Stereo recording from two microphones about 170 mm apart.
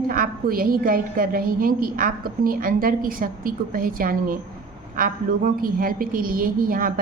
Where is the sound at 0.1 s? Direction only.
55° right (ahead or behind).